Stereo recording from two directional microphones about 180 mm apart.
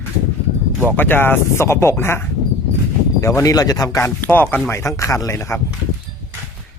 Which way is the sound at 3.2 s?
15° left (ahead or behind).